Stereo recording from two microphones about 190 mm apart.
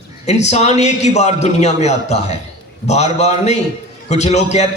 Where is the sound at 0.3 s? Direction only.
35° left (ahead or behind).